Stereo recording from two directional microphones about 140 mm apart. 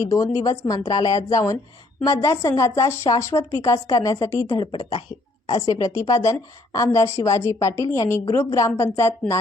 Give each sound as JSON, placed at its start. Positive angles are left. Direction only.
{"t": 0.0, "sound": "speech", "side_deg": 25}
{"t": 4.6, "sound": "speech", "side_deg": 35}
{"t": 5.5, "sound": "speech", "side_deg": 25}